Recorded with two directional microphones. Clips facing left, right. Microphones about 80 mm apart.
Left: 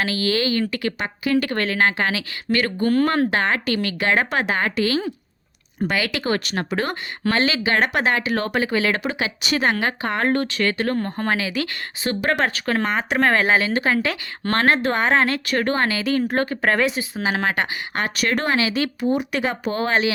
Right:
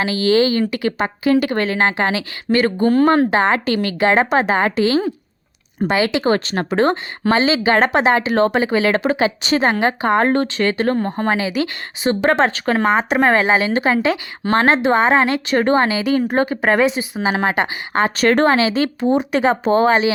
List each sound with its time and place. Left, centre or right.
0.0 s speech: right
1.4 s speech: centre